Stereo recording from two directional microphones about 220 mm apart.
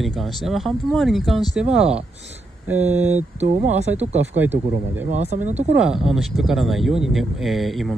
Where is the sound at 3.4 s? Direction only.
30° right (ahead or behind).